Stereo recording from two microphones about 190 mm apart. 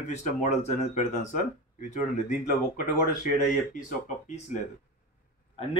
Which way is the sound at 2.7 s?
45° left (ahead or behind).